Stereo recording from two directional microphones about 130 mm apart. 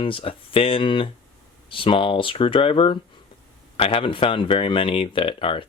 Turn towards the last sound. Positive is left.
turn(degrees=45)  # may be behind; listen again after turning